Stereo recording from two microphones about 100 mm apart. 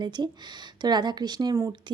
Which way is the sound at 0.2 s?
40° right (ahead or behind).